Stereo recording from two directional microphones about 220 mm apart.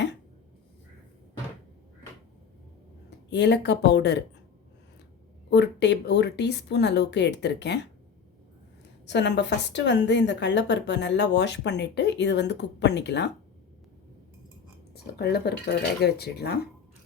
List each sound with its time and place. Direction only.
3.2 s speech: 50° left (ahead or behind)
5.5 s speech: 50° left (ahead or behind)
9.0 s speech: 50° left (ahead or behind)
14.9 s speech: 45° left (ahead or behind)